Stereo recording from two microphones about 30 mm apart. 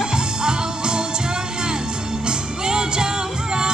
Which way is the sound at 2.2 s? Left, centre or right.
Right.